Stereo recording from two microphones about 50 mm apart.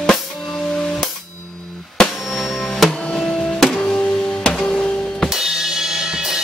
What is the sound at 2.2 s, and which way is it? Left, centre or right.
Music, centre.